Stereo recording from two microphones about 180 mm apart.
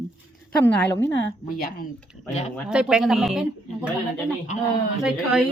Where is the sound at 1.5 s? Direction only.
55° left (ahead or behind).